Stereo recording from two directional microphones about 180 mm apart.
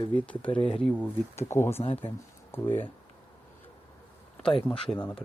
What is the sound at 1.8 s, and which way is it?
Speech, 35° left (ahead or behind).